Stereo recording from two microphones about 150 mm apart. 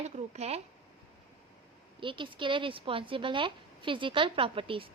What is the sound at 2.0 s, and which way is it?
A woman's voice, 35° right (ahead or behind).